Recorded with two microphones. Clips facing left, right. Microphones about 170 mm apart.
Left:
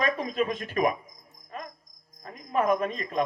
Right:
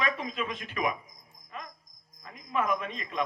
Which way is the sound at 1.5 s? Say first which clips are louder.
Left 4 dB; 40° left (ahead or behind).